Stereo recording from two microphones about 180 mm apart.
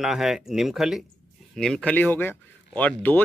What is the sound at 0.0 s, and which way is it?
Speech, centre (ahead or behind).